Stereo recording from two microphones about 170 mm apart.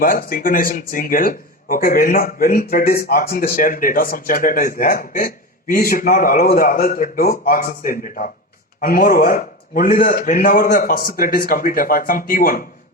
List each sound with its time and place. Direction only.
0.0 s speech: 55° left (ahead or behind)